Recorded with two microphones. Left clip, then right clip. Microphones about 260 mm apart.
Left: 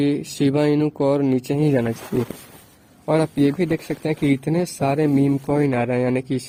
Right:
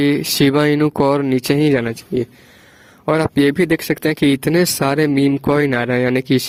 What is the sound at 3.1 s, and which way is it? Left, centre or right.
Speech, right.